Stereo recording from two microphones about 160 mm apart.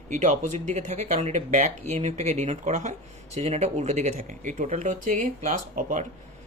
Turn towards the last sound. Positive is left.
turn(degrees=-55)  # may be behind; listen again after turning